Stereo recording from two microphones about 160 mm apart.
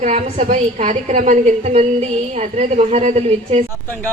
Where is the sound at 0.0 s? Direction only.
50° right (ahead or behind).